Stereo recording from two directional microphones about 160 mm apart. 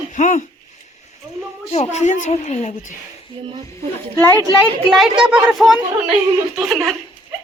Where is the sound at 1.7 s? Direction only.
45° left (ahead or behind).